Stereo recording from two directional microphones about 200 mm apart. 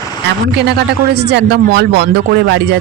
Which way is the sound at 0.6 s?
55° right (ahead or behind).